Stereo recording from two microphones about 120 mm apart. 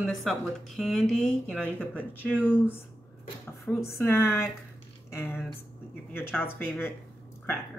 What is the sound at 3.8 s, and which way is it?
Speech, 20° left (ahead or behind).